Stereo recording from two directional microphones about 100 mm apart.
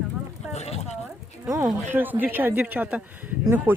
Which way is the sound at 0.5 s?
90° left.